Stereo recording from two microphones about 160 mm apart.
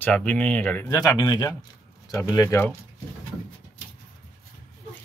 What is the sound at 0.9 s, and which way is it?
Speech, 25° left (ahead or behind).